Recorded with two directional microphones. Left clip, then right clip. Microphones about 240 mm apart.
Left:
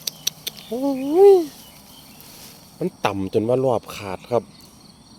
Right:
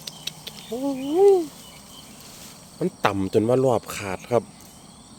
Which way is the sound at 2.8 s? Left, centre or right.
Centre.